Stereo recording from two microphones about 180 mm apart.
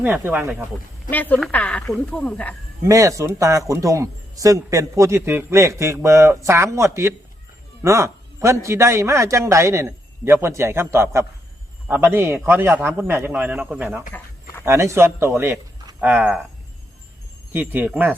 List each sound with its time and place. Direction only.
0.0 s speech: 10° right (ahead or behind)
1.1 s speech: 10° left (ahead or behind)
2.8 s speech: 15° right (ahead or behind)
17.5 s speech: 10° right (ahead or behind)